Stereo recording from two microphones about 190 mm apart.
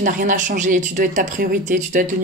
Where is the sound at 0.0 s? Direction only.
45° right (ahead or behind).